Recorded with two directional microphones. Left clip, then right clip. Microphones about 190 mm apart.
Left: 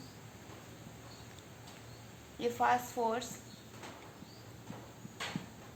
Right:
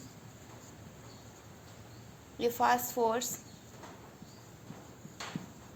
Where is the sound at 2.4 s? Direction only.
60° right (ahead or behind).